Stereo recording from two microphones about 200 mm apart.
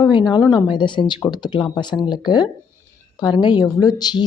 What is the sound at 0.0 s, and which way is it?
A woman's voice, 25° left (ahead or behind).